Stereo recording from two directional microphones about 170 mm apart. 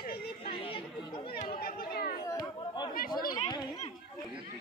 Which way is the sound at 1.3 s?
60° left (ahead or behind).